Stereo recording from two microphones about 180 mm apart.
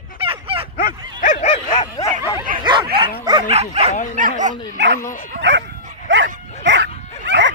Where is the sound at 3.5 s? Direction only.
35° right (ahead or behind).